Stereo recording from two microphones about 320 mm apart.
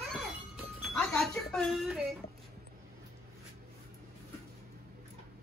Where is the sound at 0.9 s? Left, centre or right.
Centre.